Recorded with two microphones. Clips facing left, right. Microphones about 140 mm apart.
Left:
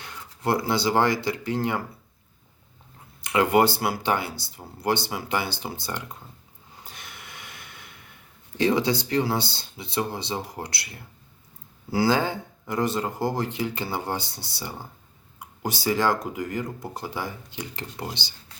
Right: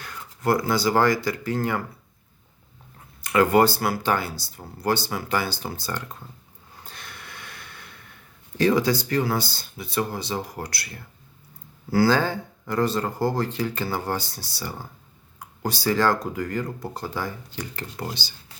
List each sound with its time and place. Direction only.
0.0 s speech: 25° left (ahead or behind)
3.2 s speech: 20° left (ahead or behind)
6.8 s snort: 15° left (ahead or behind)
8.5 s speech: 25° left (ahead or behind)
11.9 s speech: 20° left (ahead or behind)